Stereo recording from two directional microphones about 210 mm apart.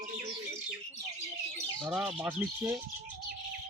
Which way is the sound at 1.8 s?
5° right (ahead or behind).